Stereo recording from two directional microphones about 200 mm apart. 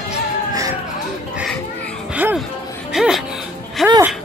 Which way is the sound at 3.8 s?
15° right (ahead or behind).